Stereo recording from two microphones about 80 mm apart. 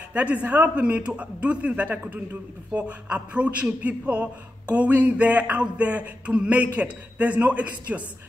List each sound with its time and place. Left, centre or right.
0.1 s a man's voice: centre